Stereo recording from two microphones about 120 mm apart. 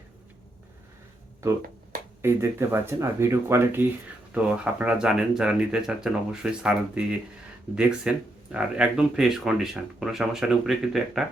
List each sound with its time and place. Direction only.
2.2 s speech: 20° right (ahead or behind); by 11.2 s centre (ahead or behind)